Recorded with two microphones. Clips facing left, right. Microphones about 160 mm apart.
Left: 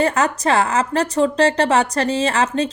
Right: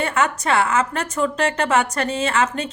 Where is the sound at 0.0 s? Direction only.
35° left (ahead or behind).